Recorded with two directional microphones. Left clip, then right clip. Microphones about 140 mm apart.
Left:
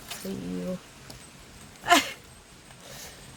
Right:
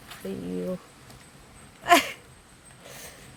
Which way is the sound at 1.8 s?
25° right (ahead or behind).